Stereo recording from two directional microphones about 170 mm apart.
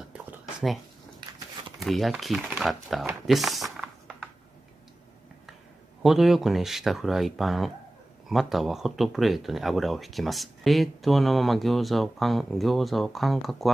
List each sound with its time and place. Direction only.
1.8 s speech: centre (ahead or behind)
3.3 s a sound: centre (ahead or behind)
6.0 s speech: centre (ahead or behind)